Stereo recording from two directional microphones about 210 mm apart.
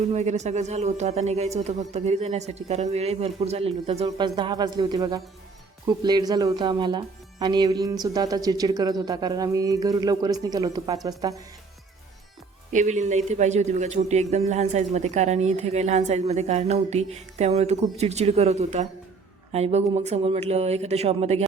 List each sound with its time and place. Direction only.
0.1 s speech: 35° right (ahead or behind); by 11.3 s 15° right (ahead or behind)
12.7 s speech: 35° right (ahead or behind)